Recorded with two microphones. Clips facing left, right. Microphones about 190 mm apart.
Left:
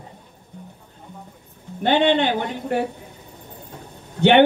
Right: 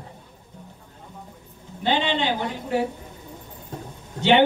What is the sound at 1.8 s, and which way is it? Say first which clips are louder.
A man's voice: left 6 dB; 55° left (ahead or behind).